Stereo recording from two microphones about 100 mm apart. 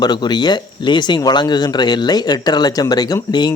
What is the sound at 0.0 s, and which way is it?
Speech, 45° left (ahead or behind).